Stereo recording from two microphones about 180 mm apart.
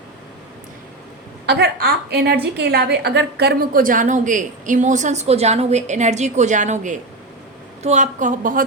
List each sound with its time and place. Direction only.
1.5 s a woman's voice: 65° right (ahead or behind); by 8.6 s 45° right (ahead or behind)